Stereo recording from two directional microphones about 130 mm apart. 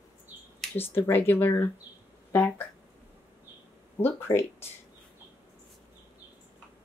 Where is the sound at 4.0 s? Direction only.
20° left (ahead or behind).